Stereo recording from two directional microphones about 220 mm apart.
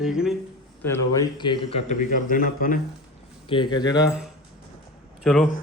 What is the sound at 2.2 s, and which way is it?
Speech, 40° left (ahead or behind).